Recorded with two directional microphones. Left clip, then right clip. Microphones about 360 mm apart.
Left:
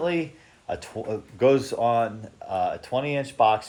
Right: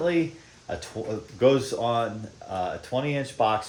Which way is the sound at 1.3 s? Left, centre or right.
Centre.